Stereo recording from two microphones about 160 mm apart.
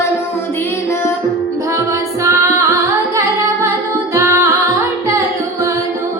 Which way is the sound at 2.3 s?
20° right (ahead or behind).